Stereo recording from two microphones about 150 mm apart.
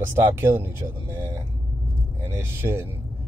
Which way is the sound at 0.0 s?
15° right (ahead or behind).